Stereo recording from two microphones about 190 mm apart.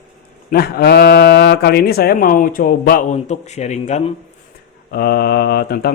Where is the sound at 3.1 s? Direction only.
35° left (ahead or behind).